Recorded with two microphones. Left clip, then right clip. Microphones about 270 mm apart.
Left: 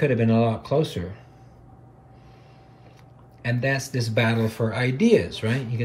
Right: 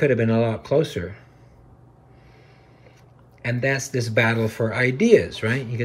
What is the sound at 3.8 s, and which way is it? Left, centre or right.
Speech, centre.